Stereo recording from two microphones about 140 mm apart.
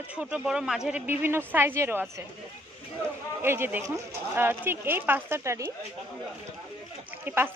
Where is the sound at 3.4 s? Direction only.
15° right (ahead or behind).